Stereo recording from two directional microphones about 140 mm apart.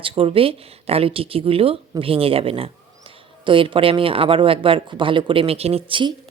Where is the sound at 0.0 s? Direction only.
40° right (ahead or behind).